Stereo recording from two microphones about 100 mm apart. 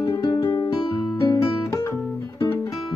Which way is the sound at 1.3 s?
35° left (ahead or behind).